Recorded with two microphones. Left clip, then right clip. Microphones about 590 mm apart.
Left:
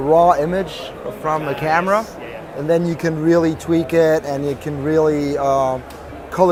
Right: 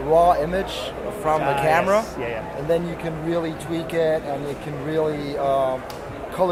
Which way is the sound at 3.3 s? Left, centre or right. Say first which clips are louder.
Left 9 dB; left.